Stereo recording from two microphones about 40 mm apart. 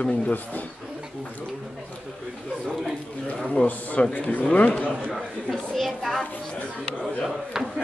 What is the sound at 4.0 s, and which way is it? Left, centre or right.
Speech, left.